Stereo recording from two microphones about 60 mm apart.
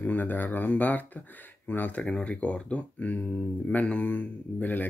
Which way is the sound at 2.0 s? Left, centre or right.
Centre.